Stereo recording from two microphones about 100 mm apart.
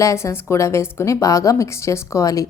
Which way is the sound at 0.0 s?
30° left (ahead or behind).